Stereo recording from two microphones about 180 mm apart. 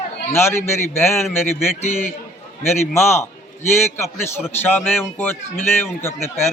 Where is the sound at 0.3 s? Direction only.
15° left (ahead or behind).